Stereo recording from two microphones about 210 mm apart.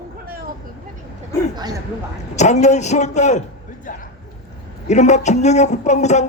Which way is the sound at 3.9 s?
40° left (ahead or behind).